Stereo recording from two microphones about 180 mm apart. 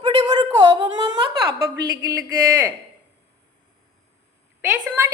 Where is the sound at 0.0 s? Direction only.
25° right (ahead or behind).